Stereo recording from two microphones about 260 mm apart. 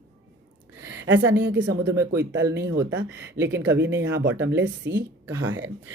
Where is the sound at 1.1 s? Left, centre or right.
Right.